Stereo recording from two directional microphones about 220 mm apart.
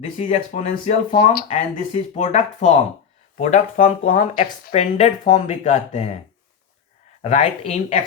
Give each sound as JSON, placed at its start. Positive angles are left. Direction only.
{"t": 0.2, "sound": "speech", "side_deg": 30}
{"t": 1.5, "sound": "speech", "side_deg": 30}
{"t": 7.2, "sound": "speech", "side_deg": 30}